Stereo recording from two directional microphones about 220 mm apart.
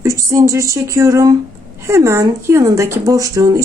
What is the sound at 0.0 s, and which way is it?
Speech, 15° right (ahead or behind).